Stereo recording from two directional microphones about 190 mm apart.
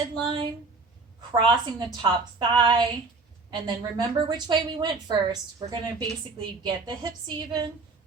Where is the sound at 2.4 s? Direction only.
25° right (ahead or behind).